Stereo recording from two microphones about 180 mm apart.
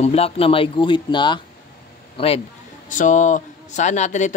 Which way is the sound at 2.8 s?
45° left (ahead or behind).